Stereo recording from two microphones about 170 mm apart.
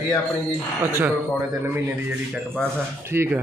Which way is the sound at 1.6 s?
15° right (ahead or behind).